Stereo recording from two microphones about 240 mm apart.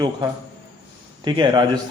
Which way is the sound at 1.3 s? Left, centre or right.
Centre.